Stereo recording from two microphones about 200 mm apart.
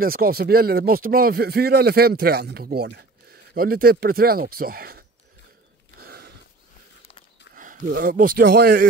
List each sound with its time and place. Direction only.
0.0 s a man's voice: 50° right (ahead or behind)
5.9 s a sound: 50° right (ahead or behind)
7.5 s speech: 40° right (ahead or behind)